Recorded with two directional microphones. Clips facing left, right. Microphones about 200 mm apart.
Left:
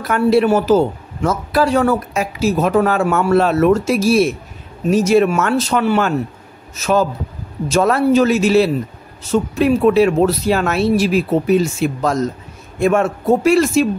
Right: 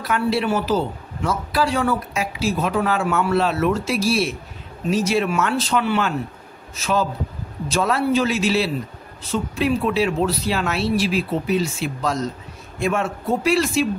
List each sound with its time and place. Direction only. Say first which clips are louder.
0.0 s a man's voice: left 7 dB; 50° left (ahead or behind)